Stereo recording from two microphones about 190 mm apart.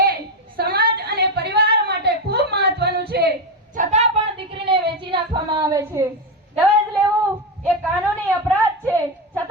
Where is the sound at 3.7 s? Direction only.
35° right (ahead or behind).